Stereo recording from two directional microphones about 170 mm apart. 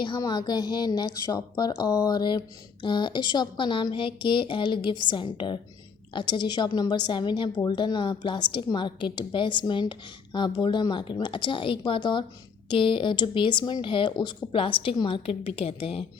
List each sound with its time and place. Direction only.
0.0 s a woman's voice: 25° left (ahead or behind)